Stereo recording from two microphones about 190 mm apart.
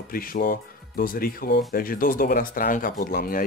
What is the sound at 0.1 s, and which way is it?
Speech, 50° left (ahead or behind).